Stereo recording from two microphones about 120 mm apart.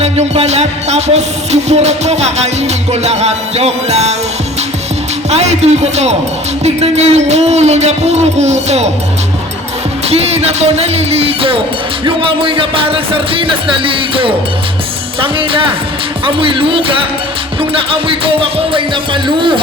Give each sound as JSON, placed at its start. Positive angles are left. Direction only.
{"t": 0.0, "sound": "music", "side_deg": -65}
{"t": 5.3, "sound": "music", "side_deg": -65}
{"t": 10.1, "sound": "music", "side_deg": -60}